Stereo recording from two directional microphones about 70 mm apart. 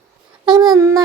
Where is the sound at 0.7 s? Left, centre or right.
Right.